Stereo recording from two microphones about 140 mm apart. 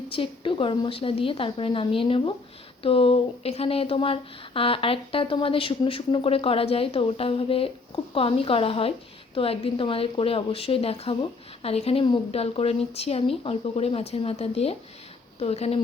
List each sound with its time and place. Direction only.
0.1 s a woman's voice: 40° left (ahead or behind)